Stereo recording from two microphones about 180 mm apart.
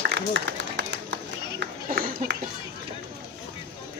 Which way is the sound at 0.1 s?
75° right (ahead or behind).